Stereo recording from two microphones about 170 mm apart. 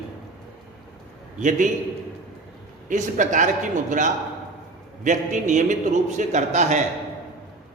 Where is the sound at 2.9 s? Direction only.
50° right (ahead or behind).